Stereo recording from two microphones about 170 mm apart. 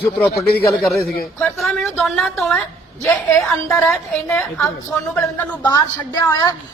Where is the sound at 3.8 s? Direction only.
10° left (ahead or behind).